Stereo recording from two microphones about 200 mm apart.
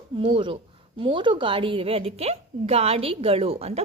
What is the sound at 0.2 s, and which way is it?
A woman's voice, 25° right (ahead or behind).